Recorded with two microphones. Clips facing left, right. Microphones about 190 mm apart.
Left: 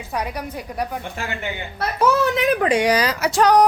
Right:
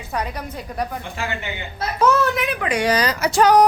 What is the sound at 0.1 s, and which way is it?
Speech, 10° left (ahead or behind).